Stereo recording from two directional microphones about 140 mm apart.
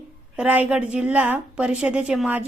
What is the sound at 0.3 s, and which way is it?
A woman's voice, 10° right (ahead or behind).